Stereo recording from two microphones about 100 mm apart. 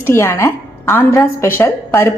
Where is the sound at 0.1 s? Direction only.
25° left (ahead or behind).